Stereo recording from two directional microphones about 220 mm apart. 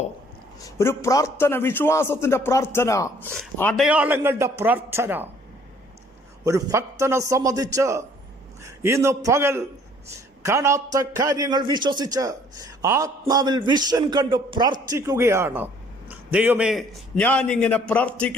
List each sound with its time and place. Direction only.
0.6 s a man's voice: 10° left (ahead or behind)
3.3 s a man's voice: 5° left (ahead or behind)
6.4 s a man's voice: 15° right (ahead or behind); by 18.3 s 5° left (ahead or behind)